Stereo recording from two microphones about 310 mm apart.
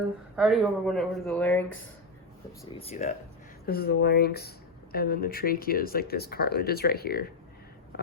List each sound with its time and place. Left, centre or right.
0.3 s speech: centre
2.5 s speech: centre